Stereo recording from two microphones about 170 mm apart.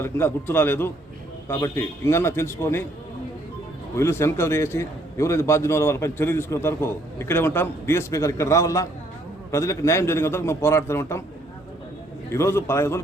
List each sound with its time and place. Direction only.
0.0 s a man's voice: 10° left (ahead or behind)
3.9 s a man's voice: 15° left (ahead or behind)
12.3 s a man's voice: 15° left (ahead or behind)